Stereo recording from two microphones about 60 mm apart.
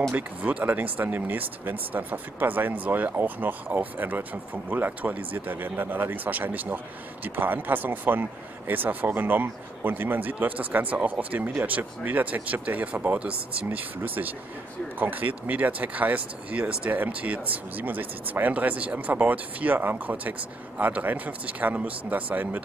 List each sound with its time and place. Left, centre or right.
0.1 s speech: right